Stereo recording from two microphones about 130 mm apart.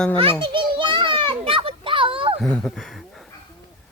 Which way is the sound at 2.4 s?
5° left (ahead or behind).